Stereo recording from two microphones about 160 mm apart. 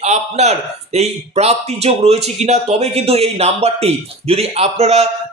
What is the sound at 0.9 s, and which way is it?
Speech, 40° right (ahead or behind).